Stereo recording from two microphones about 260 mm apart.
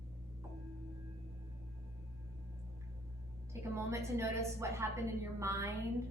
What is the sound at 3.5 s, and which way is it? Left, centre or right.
A woman's voice, centre.